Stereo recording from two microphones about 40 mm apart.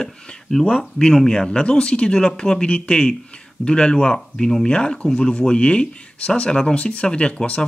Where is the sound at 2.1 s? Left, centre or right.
Centre.